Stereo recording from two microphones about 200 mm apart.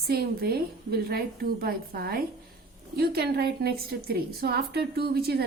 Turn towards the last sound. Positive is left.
turn(degrees=-50)  # may be behind; listen again after turning